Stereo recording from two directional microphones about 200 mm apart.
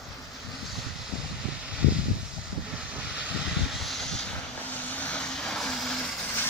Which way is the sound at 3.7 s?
Centre (ahead or behind).